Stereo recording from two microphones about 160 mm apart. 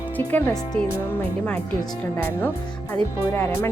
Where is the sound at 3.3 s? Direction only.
15° left (ahead or behind).